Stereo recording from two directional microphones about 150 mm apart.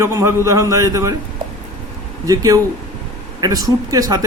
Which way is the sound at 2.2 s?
25° right (ahead or behind).